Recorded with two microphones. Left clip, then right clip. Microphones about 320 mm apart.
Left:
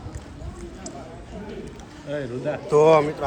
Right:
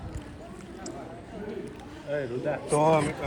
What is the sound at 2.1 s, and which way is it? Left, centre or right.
Speech, left.